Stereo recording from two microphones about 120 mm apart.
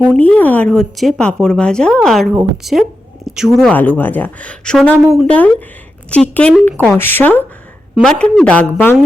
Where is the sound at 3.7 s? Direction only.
15° left (ahead or behind).